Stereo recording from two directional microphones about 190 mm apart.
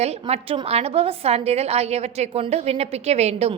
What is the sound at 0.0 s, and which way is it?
A woman's voice, 35° right (ahead or behind).